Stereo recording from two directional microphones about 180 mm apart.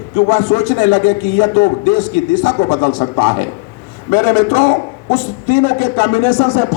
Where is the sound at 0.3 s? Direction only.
40° left (ahead or behind).